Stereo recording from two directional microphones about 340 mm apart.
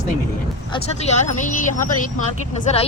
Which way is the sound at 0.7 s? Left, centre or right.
Centre.